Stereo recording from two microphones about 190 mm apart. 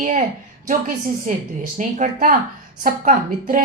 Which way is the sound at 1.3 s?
45° right (ahead or behind).